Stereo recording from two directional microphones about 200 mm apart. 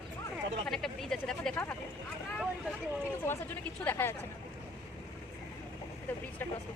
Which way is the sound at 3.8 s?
10° left (ahead or behind).